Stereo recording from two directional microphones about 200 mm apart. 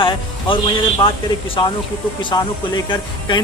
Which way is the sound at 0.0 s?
25° left (ahead or behind).